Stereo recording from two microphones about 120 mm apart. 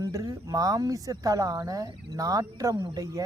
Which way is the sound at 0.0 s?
30° right (ahead or behind).